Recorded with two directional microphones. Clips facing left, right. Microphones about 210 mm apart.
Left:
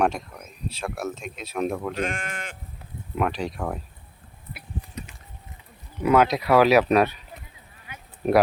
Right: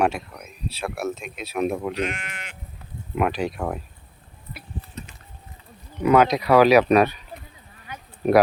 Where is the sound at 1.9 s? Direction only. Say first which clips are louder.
Right 1 dB; 50° left (ahead or behind).